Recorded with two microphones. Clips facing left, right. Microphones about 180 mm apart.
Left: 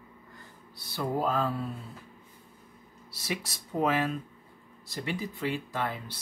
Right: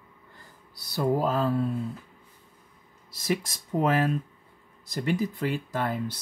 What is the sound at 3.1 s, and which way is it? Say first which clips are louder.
Speech: right 7 dB; 45° right (ahead or behind).